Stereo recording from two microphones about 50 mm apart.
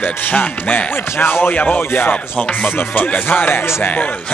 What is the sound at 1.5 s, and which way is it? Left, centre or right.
Speech, left.